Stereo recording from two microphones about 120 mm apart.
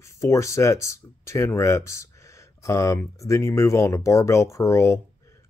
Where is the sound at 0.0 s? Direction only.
25° left (ahead or behind).